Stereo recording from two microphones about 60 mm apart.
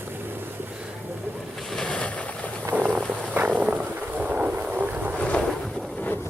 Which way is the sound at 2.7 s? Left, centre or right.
Right.